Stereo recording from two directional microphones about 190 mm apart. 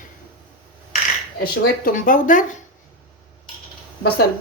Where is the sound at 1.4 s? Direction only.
50° left (ahead or behind).